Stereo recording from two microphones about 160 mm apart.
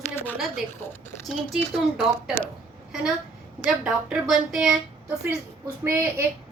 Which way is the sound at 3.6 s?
Centre (ahead or behind).